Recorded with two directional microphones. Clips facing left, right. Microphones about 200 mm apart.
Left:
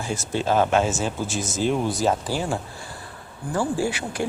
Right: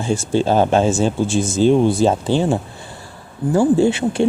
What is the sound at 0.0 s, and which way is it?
Speech, 30° right (ahead or behind).